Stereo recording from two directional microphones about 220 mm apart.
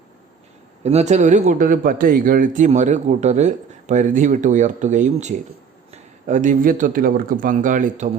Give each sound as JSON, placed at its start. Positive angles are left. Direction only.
{"t": 0.9, "sound": "a man's voice", "side_deg": -30}